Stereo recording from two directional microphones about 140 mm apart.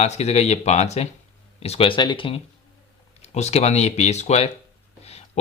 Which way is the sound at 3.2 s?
50° left (ahead or behind).